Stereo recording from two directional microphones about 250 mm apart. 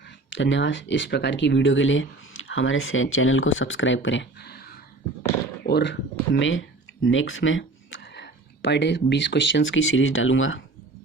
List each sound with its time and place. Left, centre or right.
0.0 s speech: left